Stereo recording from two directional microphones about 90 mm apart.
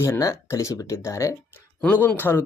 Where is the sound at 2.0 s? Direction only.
20° left (ahead or behind).